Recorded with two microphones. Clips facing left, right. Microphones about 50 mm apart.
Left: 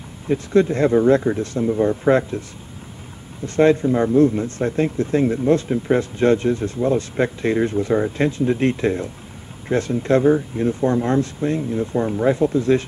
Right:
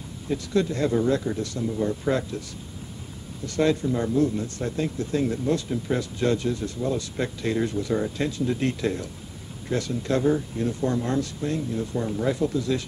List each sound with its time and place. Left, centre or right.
0.3 s speech: left
3.4 s speech: left